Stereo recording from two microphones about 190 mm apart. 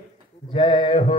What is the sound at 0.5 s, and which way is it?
Mantra, 30° left (ahead or behind).